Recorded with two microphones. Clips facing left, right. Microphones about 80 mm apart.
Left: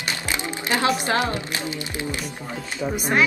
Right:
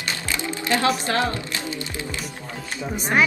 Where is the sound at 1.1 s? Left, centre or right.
Left.